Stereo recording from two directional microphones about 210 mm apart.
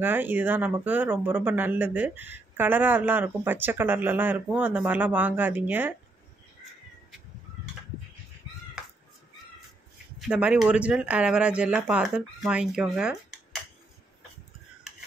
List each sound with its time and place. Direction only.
0.0 s speech: 10° right (ahead or behind)
10.2 s speech: 5° right (ahead or behind)